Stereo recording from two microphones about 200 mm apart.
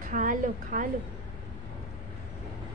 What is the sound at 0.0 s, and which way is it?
Speech, 40° right (ahead or behind).